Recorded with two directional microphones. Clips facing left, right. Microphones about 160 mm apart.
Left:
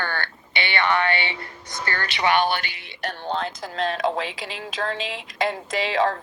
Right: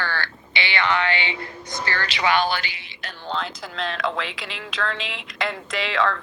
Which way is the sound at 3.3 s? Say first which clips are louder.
Even; 45° left (ahead or behind).